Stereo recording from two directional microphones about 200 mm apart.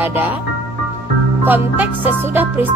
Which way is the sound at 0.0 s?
10° right (ahead or behind).